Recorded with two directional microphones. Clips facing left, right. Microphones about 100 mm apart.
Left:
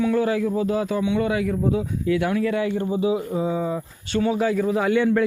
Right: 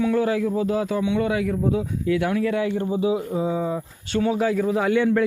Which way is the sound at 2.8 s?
15° right (ahead or behind).